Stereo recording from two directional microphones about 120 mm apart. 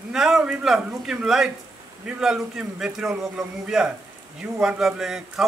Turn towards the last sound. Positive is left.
turn(degrees=-5)  # may be behind; listen again after turning